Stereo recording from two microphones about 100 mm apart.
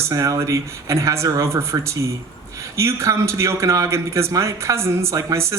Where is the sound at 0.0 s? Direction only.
30° right (ahead or behind).